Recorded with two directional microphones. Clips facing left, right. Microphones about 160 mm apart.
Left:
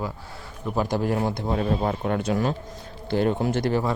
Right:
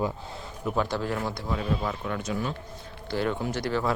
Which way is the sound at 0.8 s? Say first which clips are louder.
Left 5 dB; 15° left (ahead or behind).